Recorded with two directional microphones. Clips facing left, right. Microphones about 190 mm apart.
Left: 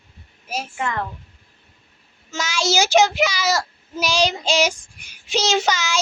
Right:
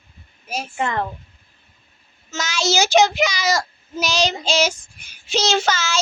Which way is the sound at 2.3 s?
10° left (ahead or behind).